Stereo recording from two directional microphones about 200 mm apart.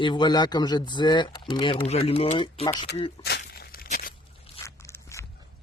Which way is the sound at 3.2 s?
55° left (ahead or behind).